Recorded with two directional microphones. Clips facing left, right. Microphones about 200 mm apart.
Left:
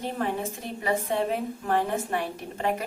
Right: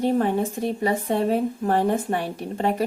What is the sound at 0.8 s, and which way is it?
Speech, 35° right (ahead or behind).